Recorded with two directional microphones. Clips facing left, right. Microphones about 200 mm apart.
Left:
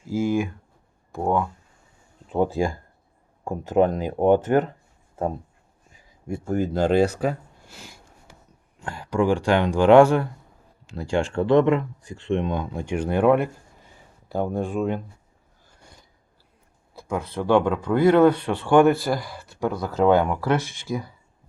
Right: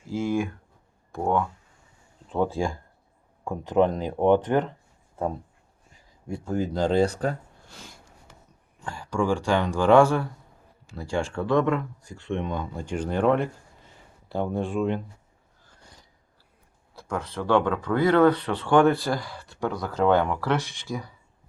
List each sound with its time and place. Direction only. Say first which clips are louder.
0.1 s speech: left 3 dB; 5° left (ahead or behind)
6.4 s speech: left 3 dB; 10° left (ahead or behind)
17.0 s speech: left 3 dB; 10° left (ahead or behind)